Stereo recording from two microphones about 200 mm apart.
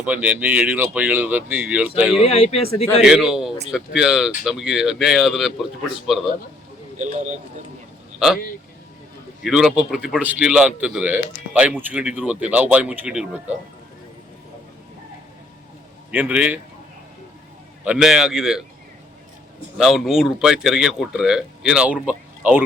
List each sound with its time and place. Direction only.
0.0 s speech: 10° right (ahead or behind)
2.2 s speech: 30° left (ahead or behind)
3.0 s a man's voice: 5° right (ahead or behind)
7.0 s speech: 35° right (ahead or behind)
9.4 s a man's voice: centre (ahead or behind)
16.1 s speech: 10° right (ahead or behind)
17.8 s a man's voice: 5° right (ahead or behind)
19.7 s a man's voice: centre (ahead or behind)